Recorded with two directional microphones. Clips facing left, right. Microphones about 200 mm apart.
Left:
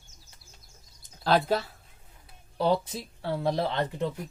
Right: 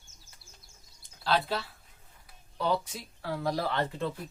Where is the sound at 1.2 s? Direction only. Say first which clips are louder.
Left 5 dB; 45° left (ahead or behind).